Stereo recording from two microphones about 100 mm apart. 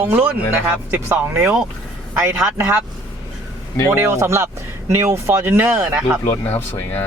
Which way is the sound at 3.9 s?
25° right (ahead or behind).